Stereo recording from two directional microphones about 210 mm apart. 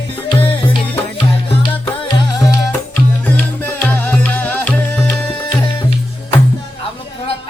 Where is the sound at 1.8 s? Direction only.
15° left (ahead or behind).